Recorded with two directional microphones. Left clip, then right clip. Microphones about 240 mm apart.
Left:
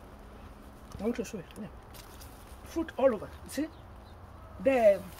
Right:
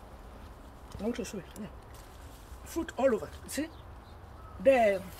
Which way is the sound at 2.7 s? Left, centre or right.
Centre.